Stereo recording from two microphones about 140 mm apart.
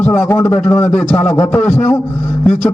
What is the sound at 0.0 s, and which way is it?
A man's voice, 15° left (ahead or behind).